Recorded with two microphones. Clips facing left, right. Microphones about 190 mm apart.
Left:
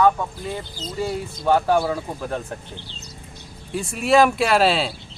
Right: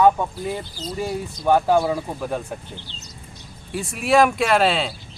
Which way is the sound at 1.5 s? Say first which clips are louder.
Right 1 dB; 15° right (ahead or behind).